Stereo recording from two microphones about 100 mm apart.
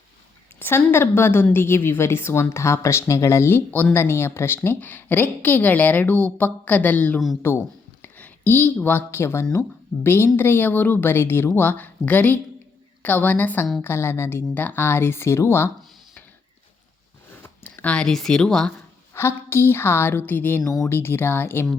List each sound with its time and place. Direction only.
0.6 s a woman's voice: 20° left (ahead or behind)
17.4 s speech: 15° left (ahead or behind)
19.1 s speech: 25° left (ahead or behind)